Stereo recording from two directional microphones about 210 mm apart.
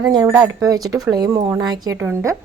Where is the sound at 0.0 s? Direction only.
15° right (ahead or behind).